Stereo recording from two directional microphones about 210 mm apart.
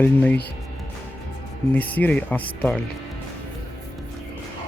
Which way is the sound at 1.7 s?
5° left (ahead or behind).